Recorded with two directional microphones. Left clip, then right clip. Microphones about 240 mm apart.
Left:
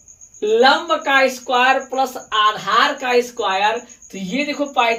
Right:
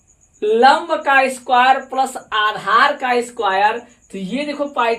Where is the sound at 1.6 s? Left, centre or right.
Right; by 4.8 s centre.